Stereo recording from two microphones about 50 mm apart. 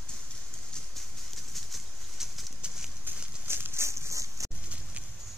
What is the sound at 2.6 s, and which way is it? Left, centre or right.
Horse, centre.